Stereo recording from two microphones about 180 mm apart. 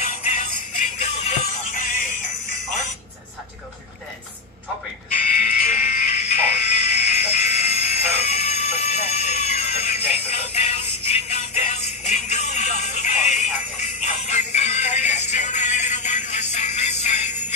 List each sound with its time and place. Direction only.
0.0 s music: 40° left (ahead or behind)
5.4 s music: 45° left (ahead or behind)
8.3 s a sound: 35° left (ahead or behind)
15.3 s music: 40° left (ahead or behind)